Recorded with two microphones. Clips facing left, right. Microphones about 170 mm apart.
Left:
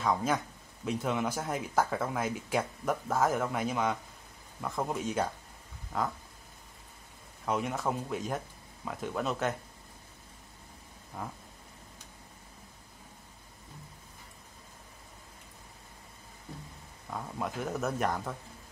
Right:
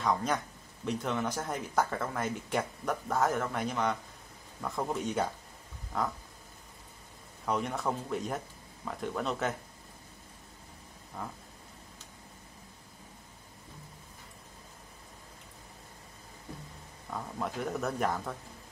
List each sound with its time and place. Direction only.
0.0 s speech: 5° left (ahead or behind)
7.4 s speech: 5° left (ahead or behind)
11.2 s speech: 5° left (ahead or behind)
17.1 s speech: centre (ahead or behind)